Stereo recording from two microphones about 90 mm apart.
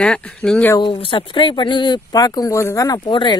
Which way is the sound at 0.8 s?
80° left.